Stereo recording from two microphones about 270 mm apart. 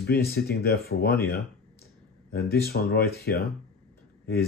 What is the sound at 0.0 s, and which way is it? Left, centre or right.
Speech, left.